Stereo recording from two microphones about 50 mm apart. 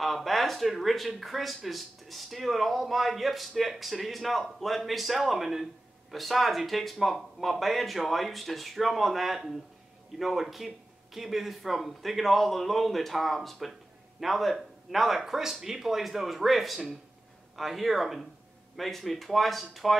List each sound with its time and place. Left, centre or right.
0.0 s speech: centre